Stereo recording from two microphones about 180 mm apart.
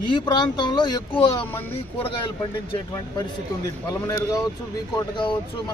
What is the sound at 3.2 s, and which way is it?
Speech, 20° left (ahead or behind).